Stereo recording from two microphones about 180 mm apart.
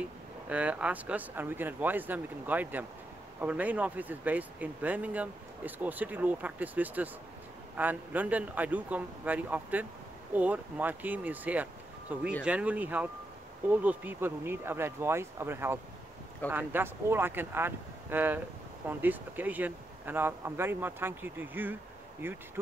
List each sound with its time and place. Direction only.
0.5 s speech: 5° right (ahead or behind)